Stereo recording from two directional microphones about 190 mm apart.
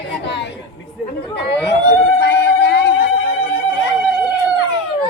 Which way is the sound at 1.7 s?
60° left (ahead or behind).